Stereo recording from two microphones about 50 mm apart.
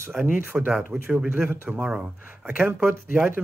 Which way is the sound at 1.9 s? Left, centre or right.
Right.